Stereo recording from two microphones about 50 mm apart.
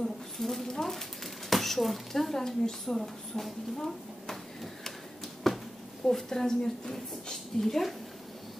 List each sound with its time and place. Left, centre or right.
0.0 s speech: centre
5.4 s a sound: centre
6.0 s a woman's voice: centre